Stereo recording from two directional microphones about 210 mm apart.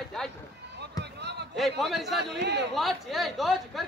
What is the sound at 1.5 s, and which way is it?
Speech, centre (ahead or behind).